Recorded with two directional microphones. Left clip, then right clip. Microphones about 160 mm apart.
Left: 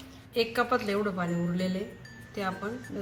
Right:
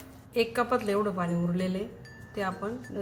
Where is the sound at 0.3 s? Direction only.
25° right (ahead or behind).